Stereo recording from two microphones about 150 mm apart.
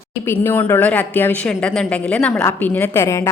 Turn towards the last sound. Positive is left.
turn(degrees=20)  # may be behind; listen again after turning